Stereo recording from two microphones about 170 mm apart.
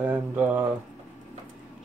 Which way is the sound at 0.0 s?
10° right (ahead or behind).